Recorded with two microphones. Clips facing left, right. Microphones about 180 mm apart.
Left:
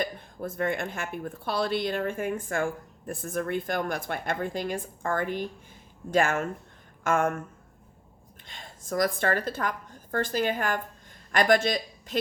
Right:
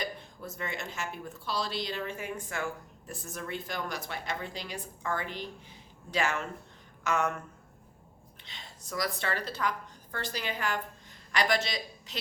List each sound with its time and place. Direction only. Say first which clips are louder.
0.0 s speech: left 6 dB; 50° left (ahead or behind)
8.4 s speech: left 8 dB; 50° left (ahead or behind)